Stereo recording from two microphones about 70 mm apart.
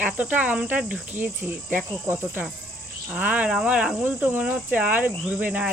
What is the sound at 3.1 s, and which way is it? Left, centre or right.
Cricket, right.